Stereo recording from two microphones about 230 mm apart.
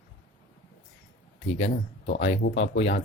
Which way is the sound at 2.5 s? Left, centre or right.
Left.